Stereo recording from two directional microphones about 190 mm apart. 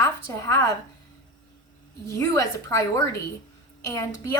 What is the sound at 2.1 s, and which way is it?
A woman's voice, 15° left (ahead or behind).